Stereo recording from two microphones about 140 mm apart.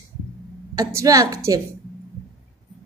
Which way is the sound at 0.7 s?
25° right (ahead or behind).